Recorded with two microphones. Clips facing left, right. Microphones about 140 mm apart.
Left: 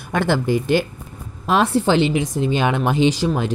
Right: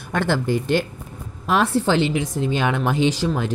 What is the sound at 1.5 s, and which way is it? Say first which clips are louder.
A woman's voice: left 2 dB; 20° left (ahead or behind).